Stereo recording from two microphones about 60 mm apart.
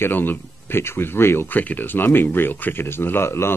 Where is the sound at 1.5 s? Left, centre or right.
Left.